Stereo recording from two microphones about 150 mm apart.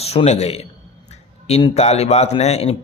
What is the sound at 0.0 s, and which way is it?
A man's voice, 45° left (ahead or behind).